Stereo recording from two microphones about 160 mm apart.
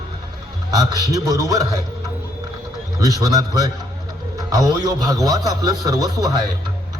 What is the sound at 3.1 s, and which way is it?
A man's voice, 25° right (ahead or behind).